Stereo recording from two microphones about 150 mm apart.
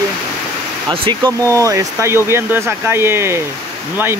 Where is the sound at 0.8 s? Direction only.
25° right (ahead or behind).